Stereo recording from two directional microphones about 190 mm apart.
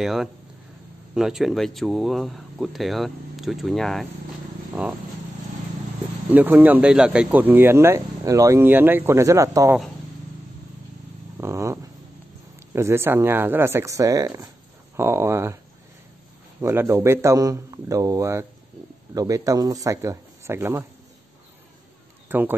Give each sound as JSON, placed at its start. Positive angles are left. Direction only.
{"t": 0.0, "sound": "speech", "side_deg": 0}
{"t": 6.3, "sound": "speech", "side_deg": -10}
{"t": 11.3, "sound": "dog", "side_deg": -15}
{"t": 12.7, "sound": "speech", "side_deg": -15}
{"t": 16.6, "sound": "speech", "side_deg": -15}
{"t": 22.3, "sound": "speech", "side_deg": -10}